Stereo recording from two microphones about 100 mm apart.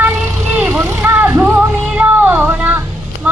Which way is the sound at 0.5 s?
15° right (ahead or behind).